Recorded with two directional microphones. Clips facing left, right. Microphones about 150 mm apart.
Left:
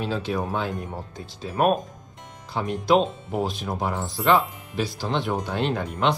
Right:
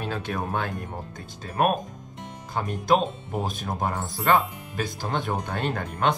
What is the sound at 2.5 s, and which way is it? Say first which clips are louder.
Speech: left 2 dB; 50° right (ahead or behind).